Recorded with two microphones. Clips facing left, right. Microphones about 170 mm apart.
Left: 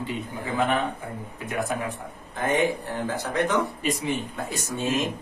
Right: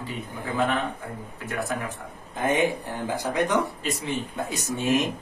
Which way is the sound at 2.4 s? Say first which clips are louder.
Even; 15° right (ahead or behind).